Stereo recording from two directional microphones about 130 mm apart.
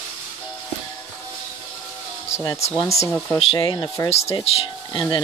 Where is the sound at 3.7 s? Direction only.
30° left (ahead or behind).